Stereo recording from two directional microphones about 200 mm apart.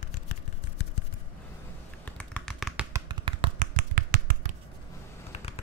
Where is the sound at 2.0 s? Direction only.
5° left (ahead or behind).